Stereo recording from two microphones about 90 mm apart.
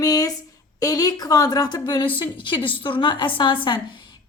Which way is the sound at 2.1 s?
65° left (ahead or behind).